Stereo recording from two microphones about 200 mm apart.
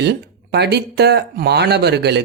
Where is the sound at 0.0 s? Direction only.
55° right (ahead or behind).